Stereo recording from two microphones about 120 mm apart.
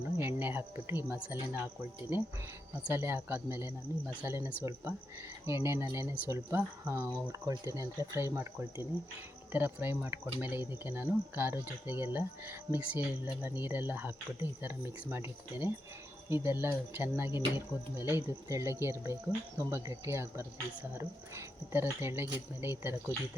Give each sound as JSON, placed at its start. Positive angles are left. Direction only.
{"t": 0.0, "sound": "speech", "side_deg": -15}